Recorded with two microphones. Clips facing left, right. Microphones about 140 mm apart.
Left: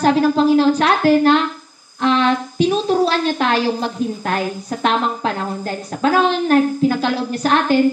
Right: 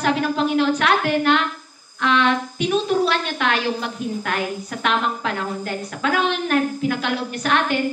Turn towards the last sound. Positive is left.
turn(degrees=35)  # may be behind; listen again after turning